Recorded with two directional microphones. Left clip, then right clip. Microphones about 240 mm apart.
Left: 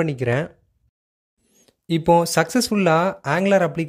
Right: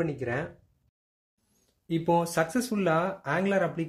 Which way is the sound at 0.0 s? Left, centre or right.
Left.